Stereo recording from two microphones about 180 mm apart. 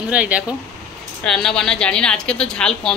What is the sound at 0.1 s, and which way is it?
A woman's voice, 5° right (ahead or behind).